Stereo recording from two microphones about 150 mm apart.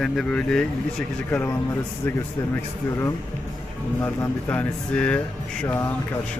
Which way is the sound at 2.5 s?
15° left (ahead or behind).